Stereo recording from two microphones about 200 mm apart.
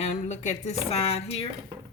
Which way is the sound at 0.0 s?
35° left (ahead or behind).